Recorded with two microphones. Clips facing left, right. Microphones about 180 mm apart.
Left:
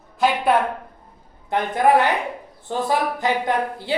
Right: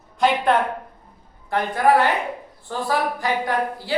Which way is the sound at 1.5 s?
20° left (ahead or behind).